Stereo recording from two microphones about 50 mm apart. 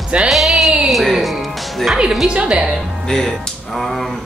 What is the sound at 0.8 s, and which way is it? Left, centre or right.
Music, centre.